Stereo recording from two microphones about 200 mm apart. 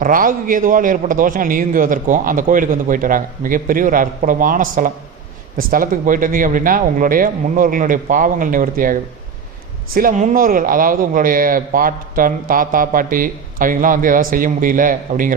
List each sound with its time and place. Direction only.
0.0 s a man's voice: 45° right (ahead or behind)